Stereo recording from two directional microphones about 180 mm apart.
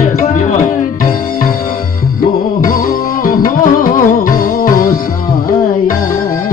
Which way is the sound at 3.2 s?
50° left (ahead or behind).